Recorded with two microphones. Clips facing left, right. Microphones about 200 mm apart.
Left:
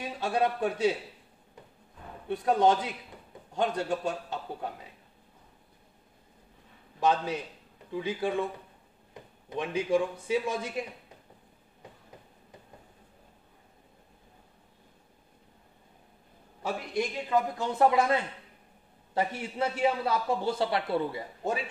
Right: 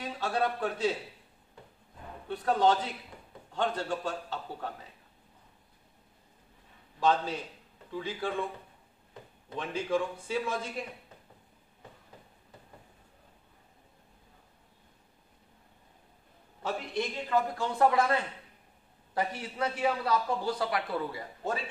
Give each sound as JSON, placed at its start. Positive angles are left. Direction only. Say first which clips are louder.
{"t": 0.0, "sound": "a man's voice", "louder": "left 2 dB", "side_deg": 15}
{"t": 2.2, "sound": "a man's voice", "louder": "left 2 dB", "side_deg": 15}
{"t": 7.0, "sound": "a man's voice", "louder": "left 1 dB", "side_deg": 15}
{"t": 9.5, "sound": "a man's voice", "louder": "left 4 dB", "side_deg": 15}
{"t": 16.6, "sound": "a man's voice", "louder": "left 2 dB", "side_deg": 10}